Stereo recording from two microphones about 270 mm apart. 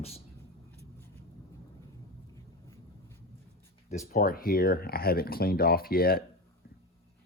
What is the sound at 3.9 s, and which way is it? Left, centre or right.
Speech, left.